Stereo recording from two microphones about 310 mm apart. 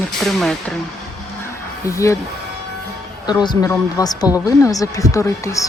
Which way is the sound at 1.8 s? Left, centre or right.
Centre.